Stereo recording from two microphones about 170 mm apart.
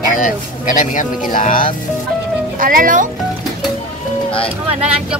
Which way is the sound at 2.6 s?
55° right (ahead or behind).